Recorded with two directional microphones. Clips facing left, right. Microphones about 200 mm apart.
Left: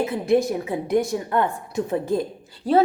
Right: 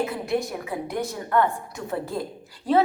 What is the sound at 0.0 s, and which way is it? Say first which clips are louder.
A woman's voice: left 6 dB; 25° left (ahead or behind).